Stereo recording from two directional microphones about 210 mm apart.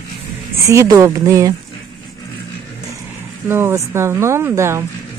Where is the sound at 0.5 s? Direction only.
15° right (ahead or behind).